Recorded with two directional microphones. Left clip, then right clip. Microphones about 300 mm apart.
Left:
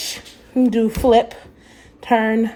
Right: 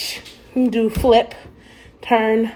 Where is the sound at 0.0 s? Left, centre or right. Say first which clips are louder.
Right 1 dB; left.